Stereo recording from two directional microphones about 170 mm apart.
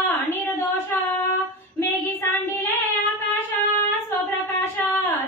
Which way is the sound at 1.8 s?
10° left (ahead or behind).